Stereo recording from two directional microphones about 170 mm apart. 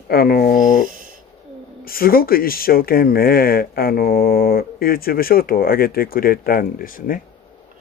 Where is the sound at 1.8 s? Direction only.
60° left (ahead or behind).